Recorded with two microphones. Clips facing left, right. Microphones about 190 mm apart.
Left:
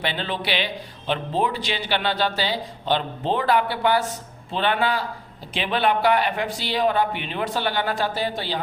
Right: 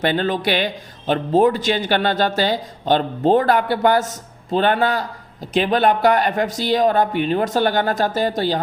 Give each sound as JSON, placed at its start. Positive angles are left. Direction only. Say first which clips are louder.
{"t": 0.0, "sound": "speech", "louder": "right 8 dB", "side_deg": -50}